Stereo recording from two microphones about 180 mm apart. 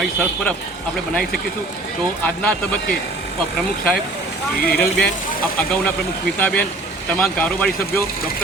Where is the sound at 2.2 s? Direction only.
10° left (ahead or behind).